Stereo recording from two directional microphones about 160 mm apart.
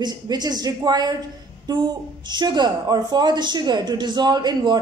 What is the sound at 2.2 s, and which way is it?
A woman's voice, 25° right (ahead or behind).